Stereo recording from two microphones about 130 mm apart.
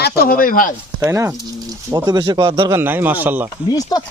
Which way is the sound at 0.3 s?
90° left.